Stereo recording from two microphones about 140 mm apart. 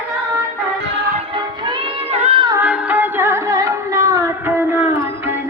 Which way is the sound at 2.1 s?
50° right (ahead or behind).